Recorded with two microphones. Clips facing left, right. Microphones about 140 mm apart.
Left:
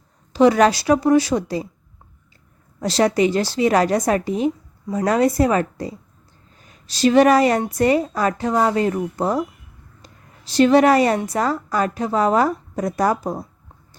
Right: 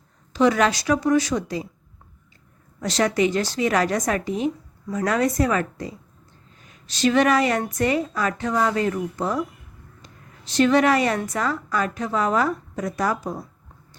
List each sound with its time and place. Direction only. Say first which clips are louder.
0.3 s a woman's voice: left 5 dB; 30° left (ahead or behind)
2.8 s a woman's voice: left 4 dB; 35° left (ahead or behind)